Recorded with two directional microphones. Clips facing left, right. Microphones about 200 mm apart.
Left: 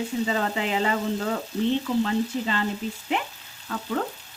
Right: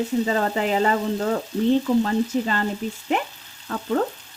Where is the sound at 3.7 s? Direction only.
40° right (ahead or behind).